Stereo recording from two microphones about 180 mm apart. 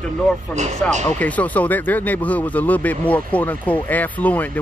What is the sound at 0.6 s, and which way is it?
Speech, 40° right (ahead or behind).